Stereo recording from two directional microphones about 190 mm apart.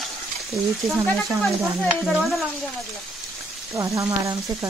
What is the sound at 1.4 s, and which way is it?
Stir, centre (ahead or behind).